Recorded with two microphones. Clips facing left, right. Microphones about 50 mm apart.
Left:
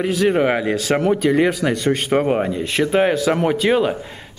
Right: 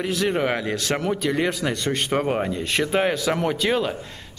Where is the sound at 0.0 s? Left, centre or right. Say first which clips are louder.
Left 6 dB; centre.